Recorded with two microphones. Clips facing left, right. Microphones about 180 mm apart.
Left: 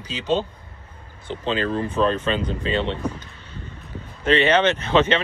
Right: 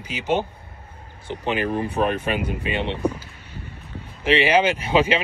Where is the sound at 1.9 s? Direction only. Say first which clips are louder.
Left 3 dB; 65° right (ahead or behind).